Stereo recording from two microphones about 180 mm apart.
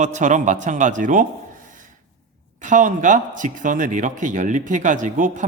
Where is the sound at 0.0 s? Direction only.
45° right (ahead or behind).